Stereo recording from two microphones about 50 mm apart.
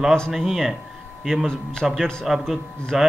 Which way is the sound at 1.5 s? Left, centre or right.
Centre.